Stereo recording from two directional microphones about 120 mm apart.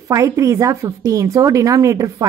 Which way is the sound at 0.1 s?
25° right (ahead or behind).